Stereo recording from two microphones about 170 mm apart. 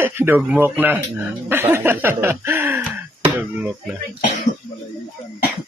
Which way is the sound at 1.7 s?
10° right (ahead or behind).